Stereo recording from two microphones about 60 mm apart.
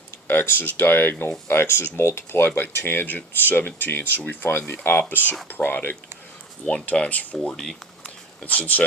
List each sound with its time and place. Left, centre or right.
0.3 s speech: left
6.7 s speech: centre
7.5 s speech: centre
8.4 s speech: left